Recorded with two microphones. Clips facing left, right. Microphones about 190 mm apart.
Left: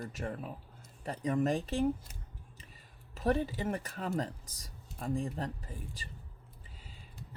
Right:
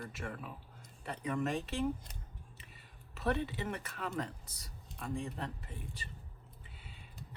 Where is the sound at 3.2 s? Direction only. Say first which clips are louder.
Left 4 dB; 35° left (ahead or behind).